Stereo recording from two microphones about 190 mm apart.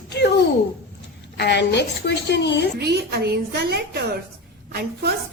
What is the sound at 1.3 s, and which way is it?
A woman's voice, 65° left (ahead or behind).